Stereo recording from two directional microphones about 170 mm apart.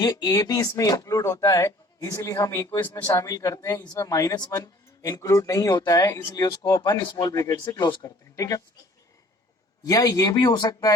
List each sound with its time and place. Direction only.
0.0 s speech: 20° left (ahead or behind)
9.8 s speech: 25° left (ahead or behind)